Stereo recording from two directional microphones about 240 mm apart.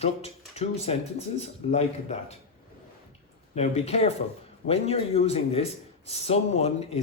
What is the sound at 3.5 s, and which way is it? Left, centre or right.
Speech, left.